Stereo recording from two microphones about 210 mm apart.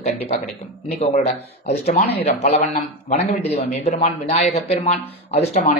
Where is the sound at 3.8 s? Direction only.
30° left (ahead or behind).